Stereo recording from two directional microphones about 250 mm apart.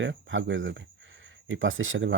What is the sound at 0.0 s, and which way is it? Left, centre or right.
Speech, right.